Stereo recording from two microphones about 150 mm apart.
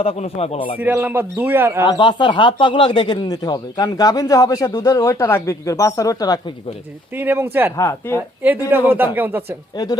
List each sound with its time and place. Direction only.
0.0 s speech: 40° left (ahead or behind)
0.8 s a man's voice: 15° right (ahead or behind)
1.8 s speech: 30° left (ahead or behind)
7.2 s a man's voice: 15° right (ahead or behind)
7.8 s a woman's voice: 15° left (ahead or behind)
9.1 s a man's voice: 10° right (ahead or behind)
9.7 s speech: 30° left (ahead or behind)